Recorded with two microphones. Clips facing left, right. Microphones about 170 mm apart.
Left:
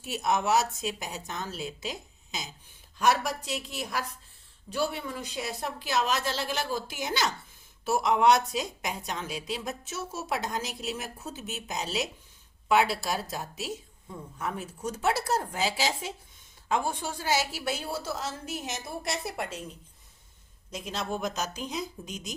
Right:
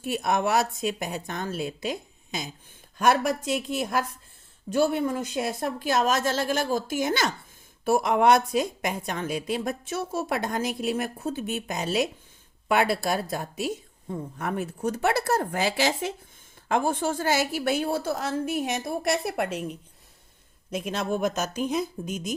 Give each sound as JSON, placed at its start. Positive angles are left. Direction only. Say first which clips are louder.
{"t": 0.0, "sound": "a woman's voice", "louder": "right 3 dB", "side_deg": -55}